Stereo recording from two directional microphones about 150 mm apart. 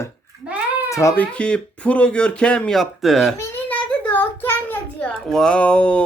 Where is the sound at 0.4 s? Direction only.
10° right (ahead or behind).